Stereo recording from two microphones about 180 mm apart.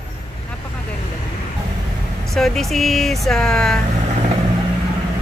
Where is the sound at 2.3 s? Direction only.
Centre (ahead or behind).